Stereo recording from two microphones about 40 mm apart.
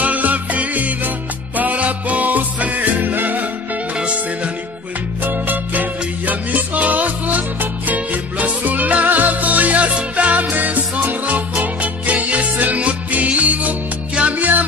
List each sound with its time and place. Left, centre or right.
0.0 s music: right
4.0 s music: right
5.2 s music: right